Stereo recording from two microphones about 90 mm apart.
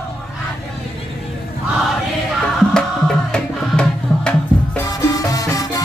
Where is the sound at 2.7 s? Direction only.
10° left (ahead or behind).